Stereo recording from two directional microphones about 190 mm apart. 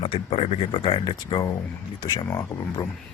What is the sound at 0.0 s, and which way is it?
Speech, 30° left (ahead or behind).